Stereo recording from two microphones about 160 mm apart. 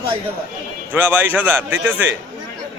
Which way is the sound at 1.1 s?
10° right (ahead or behind).